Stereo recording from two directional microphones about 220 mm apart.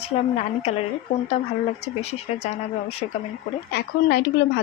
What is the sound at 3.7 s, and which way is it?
Speech, 45° left (ahead or behind).